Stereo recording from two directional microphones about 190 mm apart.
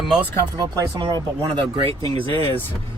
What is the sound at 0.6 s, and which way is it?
Speech, 20° right (ahead or behind).